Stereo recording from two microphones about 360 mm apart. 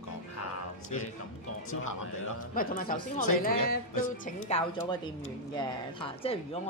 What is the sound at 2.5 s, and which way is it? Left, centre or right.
A woman's voice, left.